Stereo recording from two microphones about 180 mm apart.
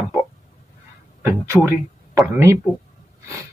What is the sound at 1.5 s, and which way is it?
Speech, 10° left (ahead or behind).